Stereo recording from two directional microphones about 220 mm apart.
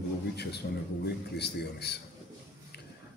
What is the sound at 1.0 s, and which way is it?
Speech, 50° left (ahead or behind).